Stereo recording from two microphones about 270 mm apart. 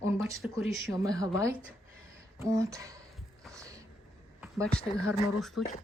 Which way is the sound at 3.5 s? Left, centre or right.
Centre.